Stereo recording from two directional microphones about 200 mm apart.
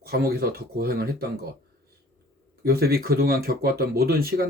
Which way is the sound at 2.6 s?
50° right (ahead or behind).